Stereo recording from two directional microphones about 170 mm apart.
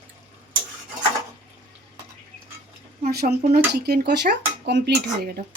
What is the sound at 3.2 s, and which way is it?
Speech, 70° right (ahead or behind).